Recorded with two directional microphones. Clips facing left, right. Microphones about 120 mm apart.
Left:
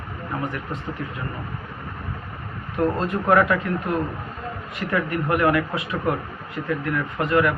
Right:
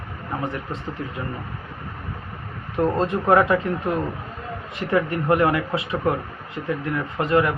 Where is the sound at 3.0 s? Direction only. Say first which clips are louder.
Right 2 dB; 25° right (ahead or behind).